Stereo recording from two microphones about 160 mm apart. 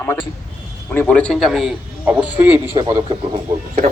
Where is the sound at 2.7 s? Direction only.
25° right (ahead or behind).